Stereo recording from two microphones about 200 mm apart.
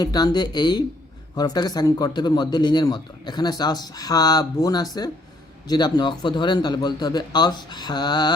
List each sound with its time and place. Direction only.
0.0 s a man's voice: 20° left (ahead or behind)